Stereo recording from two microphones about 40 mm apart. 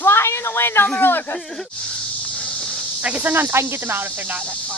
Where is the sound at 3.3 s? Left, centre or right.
Right.